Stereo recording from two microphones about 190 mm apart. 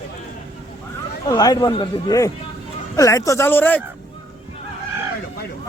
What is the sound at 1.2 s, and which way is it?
A man's voice, 20° left (ahead or behind).